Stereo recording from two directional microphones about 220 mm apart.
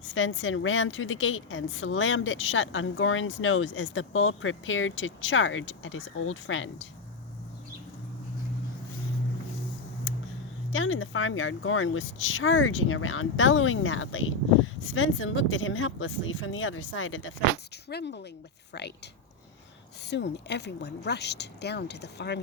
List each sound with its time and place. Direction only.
0.1 s a woman's voice: 60° left (ahead or behind)
10.7 s a woman's voice: 65° left (ahead or behind)
17.8 s speech: 50° left (ahead or behind)
20.1 s speech: 50° left (ahead or behind)